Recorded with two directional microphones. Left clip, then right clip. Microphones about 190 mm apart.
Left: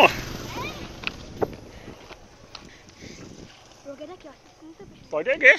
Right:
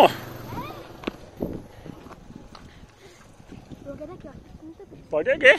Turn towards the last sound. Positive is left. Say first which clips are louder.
# right 2 dB
turn(degrees=-35)  # may be behind; listen again after turning